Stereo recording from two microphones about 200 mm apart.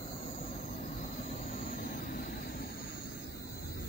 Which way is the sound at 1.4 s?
40° left (ahead or behind).